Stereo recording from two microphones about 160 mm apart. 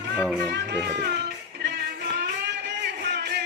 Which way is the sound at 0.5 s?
90° right.